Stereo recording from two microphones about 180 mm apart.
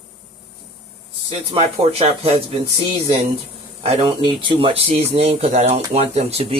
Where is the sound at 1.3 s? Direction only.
35° right (ahead or behind).